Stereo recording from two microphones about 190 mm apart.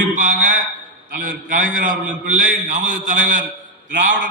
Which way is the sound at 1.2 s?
45° right (ahead or behind).